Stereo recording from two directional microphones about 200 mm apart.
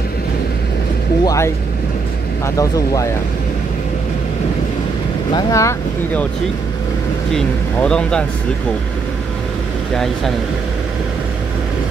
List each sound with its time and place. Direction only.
1.2 s speech: 15° left (ahead or behind)
2.5 s speech: 15° left (ahead or behind)
5.3 s speech: 15° left (ahead or behind)
7.3 s speech: 5° left (ahead or behind)